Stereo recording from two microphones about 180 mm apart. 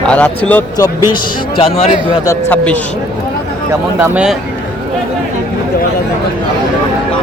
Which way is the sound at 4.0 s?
10° right (ahead or behind).